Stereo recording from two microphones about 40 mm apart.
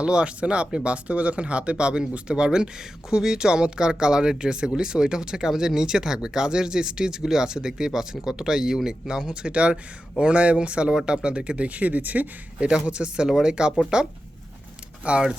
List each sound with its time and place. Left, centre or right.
0.0 s speech: right
12.6 s speech: right
15.1 s speech: right